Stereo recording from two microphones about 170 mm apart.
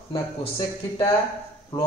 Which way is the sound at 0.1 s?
25° left (ahead or behind).